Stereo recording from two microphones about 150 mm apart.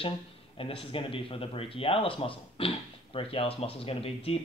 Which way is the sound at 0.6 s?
35° left (ahead or behind).